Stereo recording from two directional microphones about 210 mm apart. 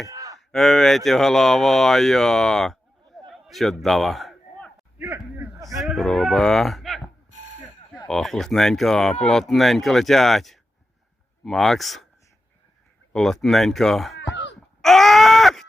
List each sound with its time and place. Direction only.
0.1 s cattle: 15° right (ahead or behind)
0.3 s speech: centre (ahead or behind)
3.2 s a sound: centre (ahead or behind)
4.9 s a man's voice: 10° right (ahead or behind)
5.8 s speech: centre (ahead or behind)
8.0 s speech: centre (ahead or behind)
13.1 s speech: centre (ahead or behind)
14.2 s cough: 55° left (ahead or behind)
14.8 s a sound: centre (ahead or behind)